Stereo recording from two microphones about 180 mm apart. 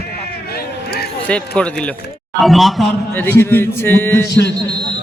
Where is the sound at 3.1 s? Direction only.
10° left (ahead or behind).